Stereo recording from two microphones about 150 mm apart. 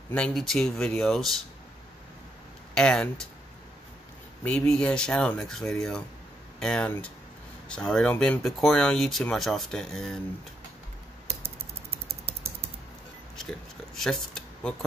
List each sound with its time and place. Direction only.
0.1 s speech: 5° left (ahead or behind)
2.7 s speech: 5° left (ahead or behind)
4.4 s speech: 5° left (ahead or behind)
12.1 s typing: 40° right (ahead or behind)
13.4 s a sound: 5° left (ahead or behind)